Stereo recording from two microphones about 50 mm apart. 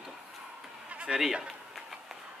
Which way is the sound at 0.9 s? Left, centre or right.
Right.